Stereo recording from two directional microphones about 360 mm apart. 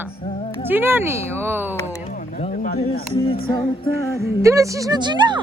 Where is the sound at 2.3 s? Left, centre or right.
Centre.